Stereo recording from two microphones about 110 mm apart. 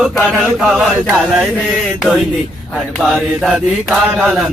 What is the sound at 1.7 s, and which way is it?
Speech, 5° right (ahead or behind).